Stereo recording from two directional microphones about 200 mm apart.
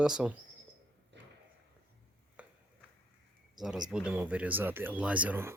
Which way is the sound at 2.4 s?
5° right (ahead or behind).